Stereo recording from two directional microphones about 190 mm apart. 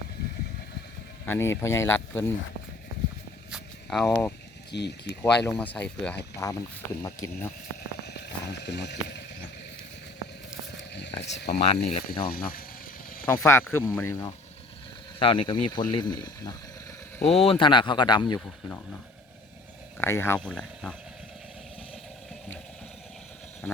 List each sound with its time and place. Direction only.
1.2 s speech: 10° left (ahead or behind)
3.5 s a sound: centre (ahead or behind)
4.7 s speech: 60° left (ahead or behind)
5.2 s speech: 5° left (ahead or behind)
8.0 s a sound: 60° left (ahead or behind)
10.8 s a sound: 65° left (ahead or behind)
11.2 s speech: 65° left (ahead or behind)
11.6 s speech: 35° left (ahead or behind)
12.2 s speech: 50° left (ahead or behind)
13.2 s speech: 15° left (ahead or behind)
15.2 s speech: 25° left (ahead or behind)
17.2 s speech: 30° left (ahead or behind)
20.0 s speech: 10° left (ahead or behind)
23.6 s speech: 10° left (ahead or behind)